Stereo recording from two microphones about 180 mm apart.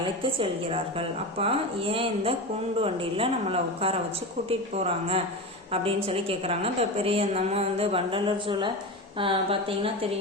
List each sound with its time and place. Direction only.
0.2 s a woman's voice: 30° right (ahead or behind)